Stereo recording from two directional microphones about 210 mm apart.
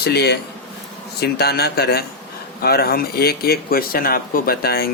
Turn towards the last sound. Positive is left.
turn(degrees=50)  # may be behind; listen again after turning